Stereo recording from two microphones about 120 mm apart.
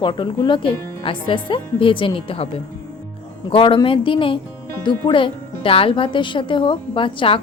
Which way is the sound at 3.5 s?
50° left (ahead or behind).